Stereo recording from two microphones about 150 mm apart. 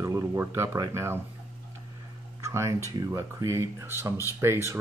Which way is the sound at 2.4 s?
20° right (ahead or behind).